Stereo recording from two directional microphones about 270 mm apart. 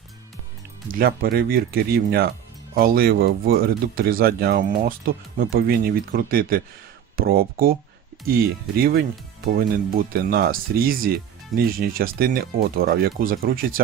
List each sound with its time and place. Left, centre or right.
0.9 s speech: right